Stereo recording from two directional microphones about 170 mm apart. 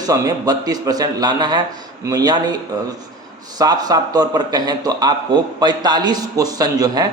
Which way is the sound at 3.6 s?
20° right (ahead or behind).